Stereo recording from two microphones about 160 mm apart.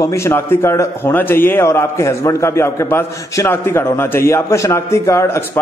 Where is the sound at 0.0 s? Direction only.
15° left (ahead or behind).